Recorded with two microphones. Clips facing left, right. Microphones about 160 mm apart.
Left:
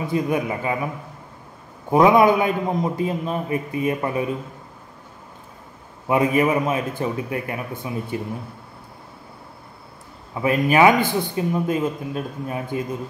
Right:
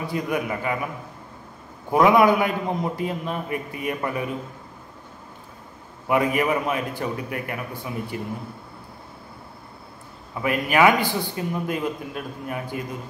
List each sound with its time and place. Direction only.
0.0 s speech: 25° left (ahead or behind)
1.9 s speech: 20° left (ahead or behind)
6.0 s speech: 25° left (ahead or behind)
10.3 s speech: 25° left (ahead or behind)